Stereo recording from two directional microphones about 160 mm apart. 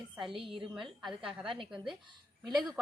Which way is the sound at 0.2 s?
Centre (ahead or behind).